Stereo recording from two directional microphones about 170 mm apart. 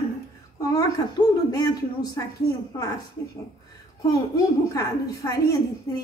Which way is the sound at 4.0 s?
20° left (ahead or behind).